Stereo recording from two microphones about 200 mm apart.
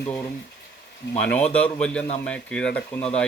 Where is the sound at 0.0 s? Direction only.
10° left (ahead or behind).